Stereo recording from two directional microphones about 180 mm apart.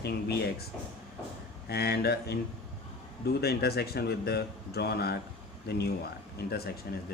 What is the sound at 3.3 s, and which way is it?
Speech, 60° left (ahead or behind).